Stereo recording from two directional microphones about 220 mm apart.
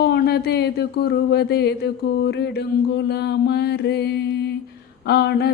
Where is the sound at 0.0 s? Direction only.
45° left (ahead or behind).